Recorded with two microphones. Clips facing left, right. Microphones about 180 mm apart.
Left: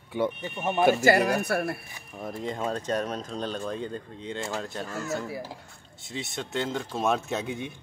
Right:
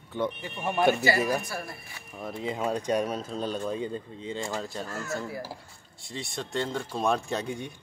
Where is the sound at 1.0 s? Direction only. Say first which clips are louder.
Left 4 dB; 65° left (ahead or behind).